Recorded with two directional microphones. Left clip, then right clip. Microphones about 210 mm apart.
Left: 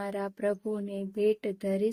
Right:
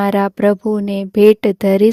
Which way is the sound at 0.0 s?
50° right (ahead or behind).